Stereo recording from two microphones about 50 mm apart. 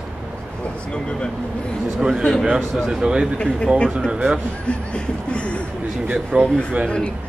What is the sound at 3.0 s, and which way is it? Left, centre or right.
Speech, centre.